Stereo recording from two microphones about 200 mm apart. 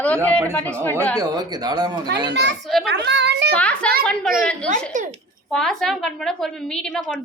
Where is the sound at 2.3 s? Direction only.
60° right (ahead or behind).